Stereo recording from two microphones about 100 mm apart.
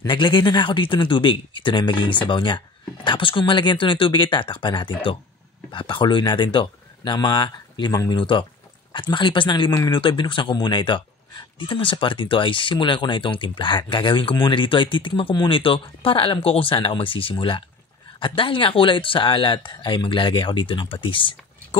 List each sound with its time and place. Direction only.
0.0 s speech: 50° left (ahead or behind)
8.2 s speech: 55° left (ahead or behind)